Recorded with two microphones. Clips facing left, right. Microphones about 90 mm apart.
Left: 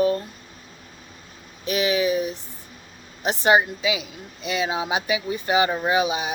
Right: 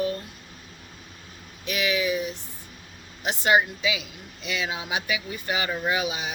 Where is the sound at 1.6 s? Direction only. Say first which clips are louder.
Left 4 dB; 30° left (ahead or behind).